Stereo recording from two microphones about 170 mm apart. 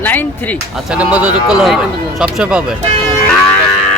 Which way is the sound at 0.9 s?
10° right (ahead or behind).